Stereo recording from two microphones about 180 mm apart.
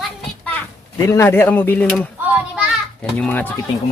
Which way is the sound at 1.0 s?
15° left (ahead or behind).